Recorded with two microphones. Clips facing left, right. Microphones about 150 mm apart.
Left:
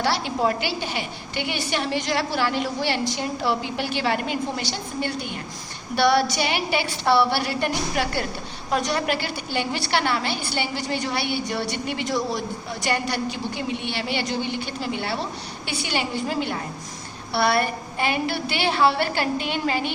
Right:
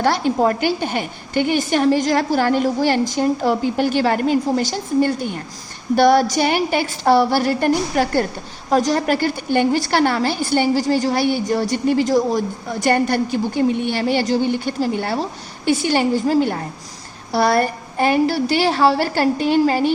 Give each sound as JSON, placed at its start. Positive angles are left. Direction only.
{"t": 0.0, "sound": "a woman's voice", "side_deg": -45}